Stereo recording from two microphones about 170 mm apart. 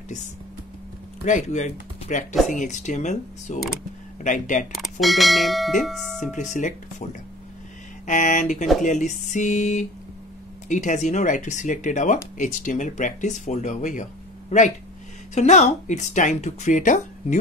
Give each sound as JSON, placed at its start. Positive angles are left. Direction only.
{"t": 1.2, "sound": "speech", "side_deg": 45}
{"t": 5.0, "sound": "speech", "side_deg": 0}
{"t": 6.5, "sound": "speech", "side_deg": 45}